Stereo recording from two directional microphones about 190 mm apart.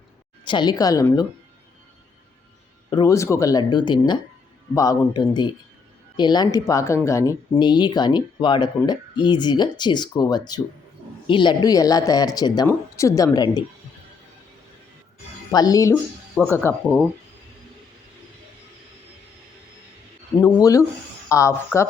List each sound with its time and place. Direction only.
0.4 s speech: 25° left (ahead or behind)
2.9 s speech: 20° left (ahead or behind)
15.5 s speech: 20° left (ahead or behind)
20.4 s speech: 15° left (ahead or behind)